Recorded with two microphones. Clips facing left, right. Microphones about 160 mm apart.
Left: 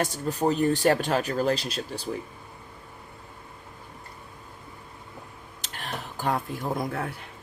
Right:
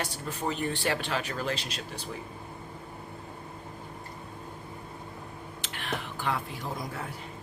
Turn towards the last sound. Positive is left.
turn(degrees=55)  # may be behind; listen again after turning